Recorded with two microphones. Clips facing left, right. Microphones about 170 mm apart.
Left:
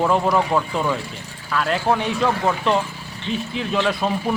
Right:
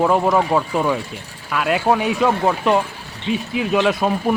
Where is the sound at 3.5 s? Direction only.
15° right (ahead or behind).